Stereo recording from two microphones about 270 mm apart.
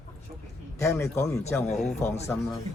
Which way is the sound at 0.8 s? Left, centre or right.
Centre.